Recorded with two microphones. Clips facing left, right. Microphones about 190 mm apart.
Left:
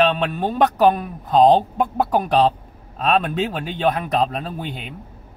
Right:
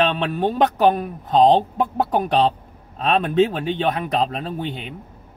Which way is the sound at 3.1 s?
30° right (ahead or behind).